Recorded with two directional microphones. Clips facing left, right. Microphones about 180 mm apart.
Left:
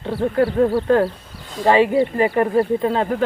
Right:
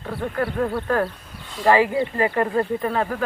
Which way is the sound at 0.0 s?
30° left (ahead or behind).